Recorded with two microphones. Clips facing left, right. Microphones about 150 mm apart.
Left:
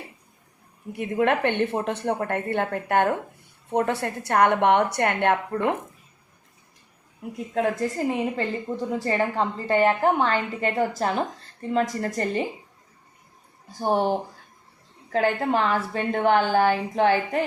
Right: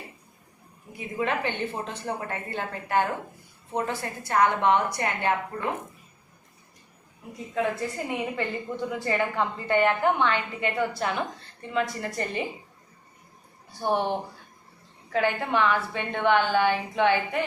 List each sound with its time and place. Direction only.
0.9 s a woman's voice: 65° left (ahead or behind)
7.3 s a woman's voice: 45° left (ahead or behind)
13.7 s a woman's voice: 40° left (ahead or behind)